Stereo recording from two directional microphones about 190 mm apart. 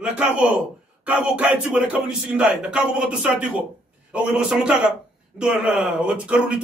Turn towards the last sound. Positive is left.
turn(degrees=-5)  # may be behind; listen again after turning